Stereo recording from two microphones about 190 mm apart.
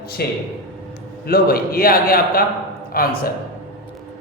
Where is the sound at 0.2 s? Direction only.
55° left (ahead or behind).